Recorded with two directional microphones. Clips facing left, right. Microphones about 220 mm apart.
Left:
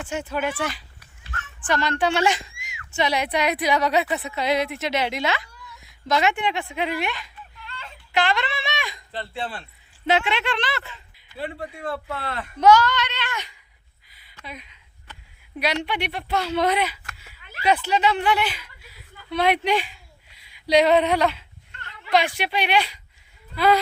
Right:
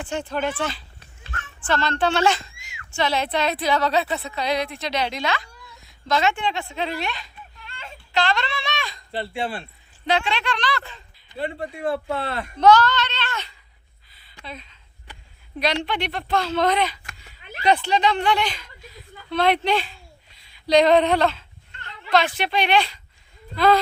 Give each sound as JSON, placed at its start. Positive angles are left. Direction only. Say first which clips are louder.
{"t": 0.1, "sound": "speech", "louder": "right 1 dB", "side_deg": 10}
{"t": 8.1, "sound": "a sound", "louder": "even", "side_deg": 15}
{"t": 9.1, "sound": "speech", "louder": "right 5 dB", "side_deg": -10}
{"t": 10.1, "sound": "speech", "louder": "left 1 dB", "side_deg": 20}
{"t": 11.6, "sound": "speech", "louder": "right 5 dB", "side_deg": -25}
{"t": 12.5, "sound": "child singing", "louder": "even", "side_deg": 10}
{"t": 14.1, "sound": "a sound", "louder": "even", "side_deg": 10}
{"t": 14.4, "sound": "speech", "louder": "right 1 dB", "side_deg": 15}